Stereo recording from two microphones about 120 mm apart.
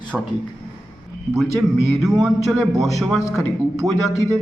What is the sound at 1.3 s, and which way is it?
A man's voice, centre (ahead or behind).